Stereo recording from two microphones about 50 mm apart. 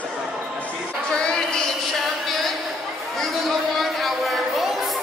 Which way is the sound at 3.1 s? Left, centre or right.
Centre.